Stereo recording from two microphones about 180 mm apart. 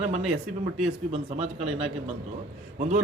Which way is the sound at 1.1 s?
35° right (ahead or behind).